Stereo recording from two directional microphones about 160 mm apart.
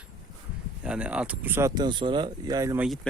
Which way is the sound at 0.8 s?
5° right (ahead or behind).